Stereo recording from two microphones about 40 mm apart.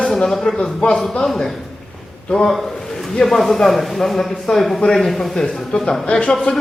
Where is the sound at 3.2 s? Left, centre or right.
Centre.